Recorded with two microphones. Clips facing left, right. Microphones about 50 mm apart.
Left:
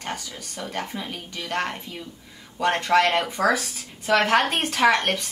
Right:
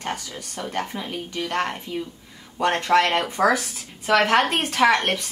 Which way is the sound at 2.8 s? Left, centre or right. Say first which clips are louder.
Even; centre.